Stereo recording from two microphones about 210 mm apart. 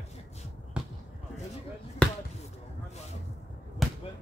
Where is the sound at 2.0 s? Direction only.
5° left (ahead or behind).